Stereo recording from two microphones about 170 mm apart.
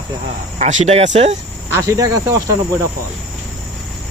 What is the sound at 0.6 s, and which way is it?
Speech, 45° right (ahead or behind).